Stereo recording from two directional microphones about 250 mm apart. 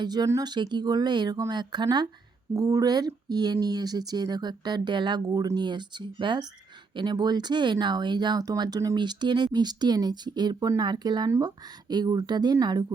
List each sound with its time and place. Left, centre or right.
0.0 s speech: centre